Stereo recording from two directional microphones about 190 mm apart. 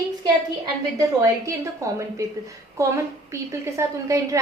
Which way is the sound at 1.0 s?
15° right (ahead or behind).